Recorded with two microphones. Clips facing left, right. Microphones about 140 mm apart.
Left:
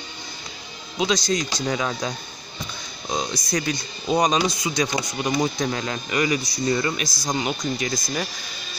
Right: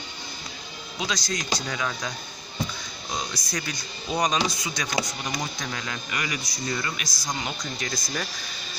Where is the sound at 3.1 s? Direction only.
25° left (ahead or behind).